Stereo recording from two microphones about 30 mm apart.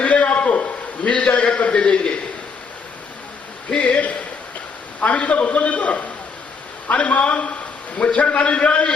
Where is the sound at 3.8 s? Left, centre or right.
Left.